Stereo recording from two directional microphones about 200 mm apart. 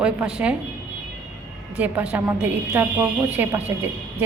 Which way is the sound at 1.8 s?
5° right (ahead or behind).